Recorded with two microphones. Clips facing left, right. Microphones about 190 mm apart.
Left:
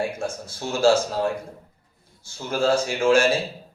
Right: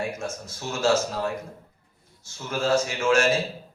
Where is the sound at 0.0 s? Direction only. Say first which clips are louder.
Left 3 dB; 30° left (ahead or behind).